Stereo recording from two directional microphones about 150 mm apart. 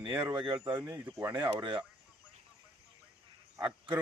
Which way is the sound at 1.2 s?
30° right (ahead or behind).